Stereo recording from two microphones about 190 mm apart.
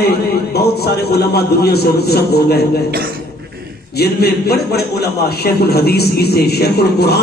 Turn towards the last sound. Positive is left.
turn(degrees=55)  # may be behind; listen again after turning